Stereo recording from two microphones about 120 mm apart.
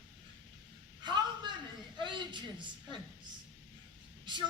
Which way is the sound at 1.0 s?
40° right (ahead or behind).